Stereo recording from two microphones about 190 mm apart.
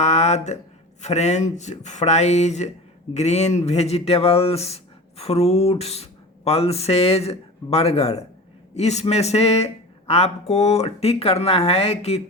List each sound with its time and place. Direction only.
0.0 s speech: 35° left (ahead or behind)